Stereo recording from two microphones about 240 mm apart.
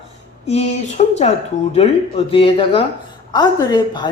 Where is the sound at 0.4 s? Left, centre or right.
Left.